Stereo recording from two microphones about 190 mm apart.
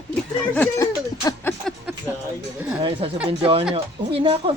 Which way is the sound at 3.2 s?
30° right (ahead or behind).